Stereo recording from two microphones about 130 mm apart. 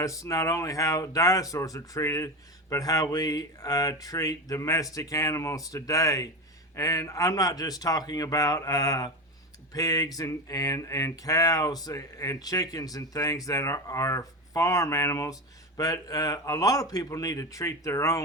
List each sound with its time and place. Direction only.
0.0 s speech: 25° left (ahead or behind)